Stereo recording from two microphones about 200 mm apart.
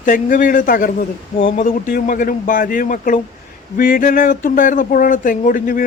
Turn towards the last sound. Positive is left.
turn(degrees=40)  # may be behind; listen again after turning